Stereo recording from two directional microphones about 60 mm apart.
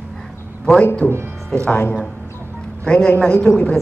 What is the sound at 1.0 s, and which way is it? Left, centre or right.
Speech, left.